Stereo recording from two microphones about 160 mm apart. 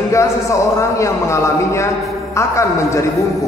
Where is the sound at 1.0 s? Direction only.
20° left (ahead or behind).